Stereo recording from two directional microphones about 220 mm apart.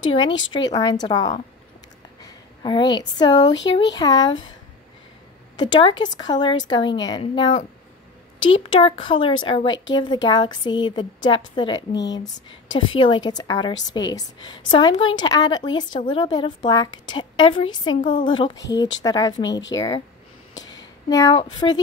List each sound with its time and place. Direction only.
0.0 s a woman's voice: 20° left (ahead or behind)
5.6 s a woman's voice: 20° left (ahead or behind)
8.6 s a woman's voice: 25° left (ahead or behind)
11.9 s speech: 55° left (ahead or behind)
12.2 s a woman's voice: 20° left (ahead or behind)
21.1 s a woman's voice: 15° left (ahead or behind)